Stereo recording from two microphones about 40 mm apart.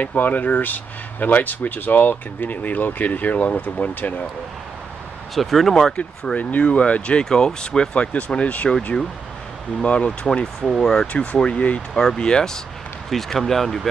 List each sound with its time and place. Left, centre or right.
0.0 s speech: left
5.3 s speech: centre
6.6 s speech: left
7.9 s speech: left
9.8 s speech: left
10.4 s speech: centre
11.1 s speech: left
13.3 s speech: centre